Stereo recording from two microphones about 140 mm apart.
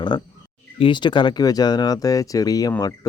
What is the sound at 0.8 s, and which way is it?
Speech, 35° left (ahead or behind).